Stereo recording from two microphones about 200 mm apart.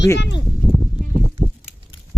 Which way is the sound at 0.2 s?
60° left (ahead or behind).